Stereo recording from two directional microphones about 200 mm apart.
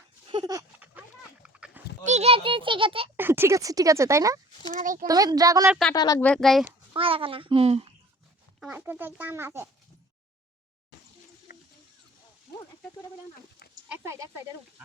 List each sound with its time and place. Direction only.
0.3 s a sound: 20° right (ahead or behind)
0.8 s pig: 5° right (ahead or behind)
2.0 s a child's voice: 30° right (ahead or behind)
3.2 s speech: 10° right (ahead or behind)
4.8 s speech: 40° right (ahead or behind)
5.0 s speech: 20° right (ahead or behind)
5.9 s speech: 20° left (ahead or behind)
6.2 s speech: 5° left (ahead or behind)
6.9 s a child's voice: 25° right (ahead or behind)
8.6 s speech: 10° right (ahead or behind)
11.5 s a sound: 45° left (ahead or behind)
13.8 s speech: 10° right (ahead or behind)